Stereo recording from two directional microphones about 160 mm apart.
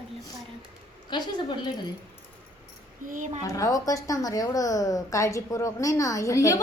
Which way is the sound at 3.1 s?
50° right (ahead or behind).